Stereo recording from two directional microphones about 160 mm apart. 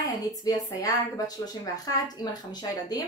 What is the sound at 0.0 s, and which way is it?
Speech, 20° left (ahead or behind).